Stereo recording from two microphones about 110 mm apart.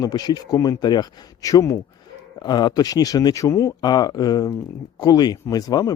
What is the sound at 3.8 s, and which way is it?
Speech, 40° left (ahead or behind).